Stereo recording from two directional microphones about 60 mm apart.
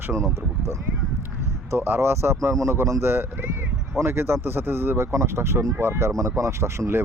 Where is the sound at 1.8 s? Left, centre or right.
Right.